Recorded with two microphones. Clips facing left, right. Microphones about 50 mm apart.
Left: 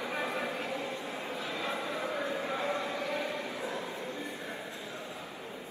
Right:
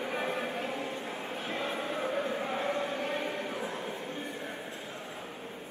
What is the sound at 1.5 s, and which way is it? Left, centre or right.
Chant, right.